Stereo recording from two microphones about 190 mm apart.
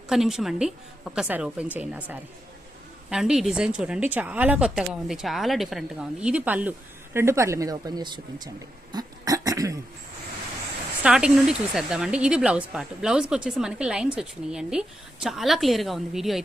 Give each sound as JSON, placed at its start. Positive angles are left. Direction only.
{"t": 0.1, "sound": "speech", "side_deg": 0}
{"t": 8.9, "sound": "a sound", "side_deg": -20}
{"t": 11.0, "sound": "speech", "side_deg": -5}